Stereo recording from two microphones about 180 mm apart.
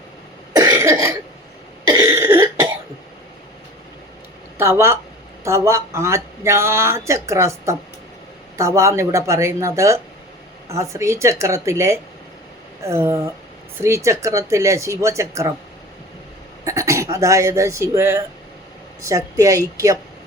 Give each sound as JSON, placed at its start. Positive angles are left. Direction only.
{"t": 0.5, "sound": "cough", "side_deg": -20}
{"t": 4.5, "sound": "speech", "side_deg": -15}
{"t": 16.6, "sound": "speech", "side_deg": -15}